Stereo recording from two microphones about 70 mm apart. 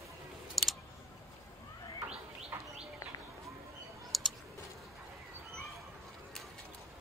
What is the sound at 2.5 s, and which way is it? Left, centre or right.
Bird, right.